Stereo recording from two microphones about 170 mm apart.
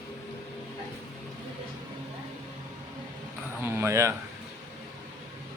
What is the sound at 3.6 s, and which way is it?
Speech, 15° right (ahead or behind).